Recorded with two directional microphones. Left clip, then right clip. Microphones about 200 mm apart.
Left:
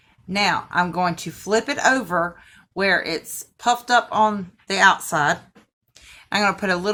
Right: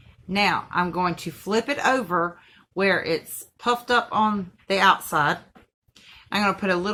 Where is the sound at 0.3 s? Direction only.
45° left (ahead or behind).